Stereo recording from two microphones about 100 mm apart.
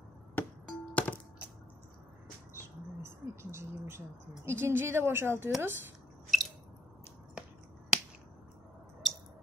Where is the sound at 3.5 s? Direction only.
25° right (ahead or behind).